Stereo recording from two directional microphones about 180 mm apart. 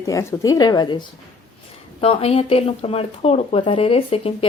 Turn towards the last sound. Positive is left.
turn(degrees=30)  # may be behind; listen again after turning